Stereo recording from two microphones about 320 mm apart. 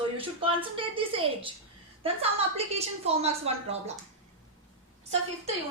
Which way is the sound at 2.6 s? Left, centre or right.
Centre.